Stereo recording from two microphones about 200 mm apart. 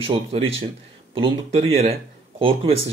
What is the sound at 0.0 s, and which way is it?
Speech, 25° right (ahead or behind).